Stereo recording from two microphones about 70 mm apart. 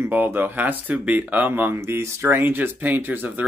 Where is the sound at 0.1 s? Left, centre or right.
Right.